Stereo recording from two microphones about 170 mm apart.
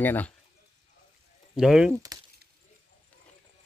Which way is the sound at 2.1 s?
20° right (ahead or behind).